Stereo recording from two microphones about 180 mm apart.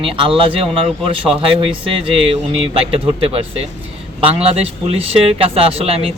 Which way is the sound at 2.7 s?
30° right (ahead or behind).